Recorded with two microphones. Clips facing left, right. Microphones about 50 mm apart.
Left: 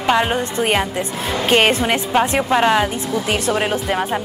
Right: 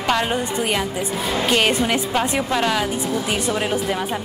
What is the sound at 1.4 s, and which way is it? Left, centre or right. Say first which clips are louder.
Speech: left 4 dB; left.